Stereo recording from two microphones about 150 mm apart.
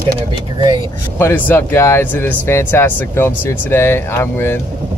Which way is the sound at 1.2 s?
15° left (ahead or behind).